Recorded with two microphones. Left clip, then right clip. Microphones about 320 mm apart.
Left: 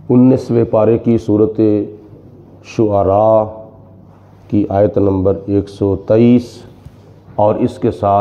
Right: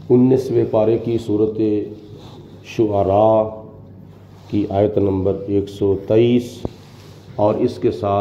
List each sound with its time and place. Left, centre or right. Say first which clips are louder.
0.1 s speech: left 3 dB; left
4.5 s speech: left 5 dB; left